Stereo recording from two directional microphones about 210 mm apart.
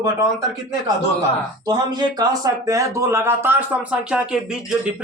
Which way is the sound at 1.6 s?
20° right (ahead or behind).